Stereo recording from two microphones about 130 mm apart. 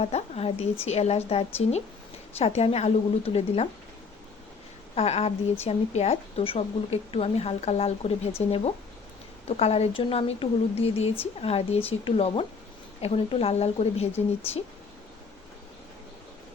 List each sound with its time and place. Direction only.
0.0 s speech: 55° left (ahead or behind)
4.9 s a woman's voice: 50° left (ahead or behind)